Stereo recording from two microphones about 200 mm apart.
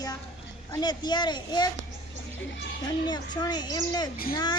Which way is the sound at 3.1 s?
20° left (ahead or behind).